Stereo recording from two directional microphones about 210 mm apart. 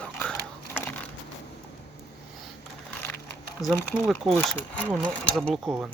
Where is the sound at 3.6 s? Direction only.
15° left (ahead or behind).